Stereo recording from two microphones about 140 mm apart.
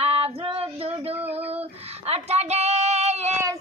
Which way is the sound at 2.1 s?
50° right (ahead or behind).